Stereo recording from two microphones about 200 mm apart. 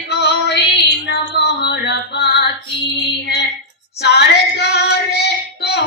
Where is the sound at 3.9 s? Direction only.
55° left (ahead or behind).